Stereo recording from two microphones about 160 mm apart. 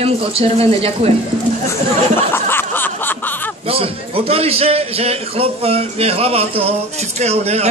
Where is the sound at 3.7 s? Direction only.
35° right (ahead or behind).